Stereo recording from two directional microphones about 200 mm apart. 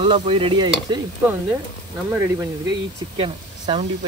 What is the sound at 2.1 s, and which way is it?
Speech, 10° right (ahead or behind).